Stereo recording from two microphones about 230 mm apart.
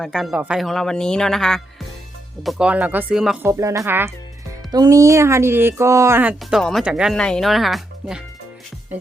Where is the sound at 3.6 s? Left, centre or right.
Centre.